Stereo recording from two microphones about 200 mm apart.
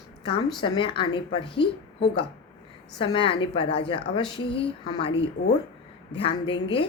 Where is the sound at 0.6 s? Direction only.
25° left (ahead or behind).